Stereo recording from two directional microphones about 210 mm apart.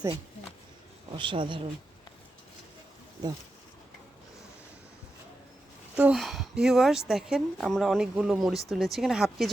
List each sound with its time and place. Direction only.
1.1 s speech: 25° right (ahead or behind)
6.0 s a woman's voice: 5° right (ahead or behind)